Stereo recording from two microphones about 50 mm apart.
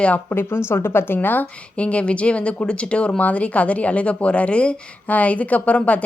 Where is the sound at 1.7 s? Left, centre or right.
Left.